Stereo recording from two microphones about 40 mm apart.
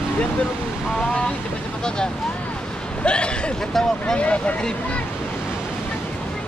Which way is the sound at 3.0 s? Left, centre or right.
Left.